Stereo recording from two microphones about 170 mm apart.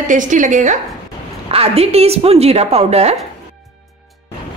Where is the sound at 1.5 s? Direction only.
35° right (ahead or behind).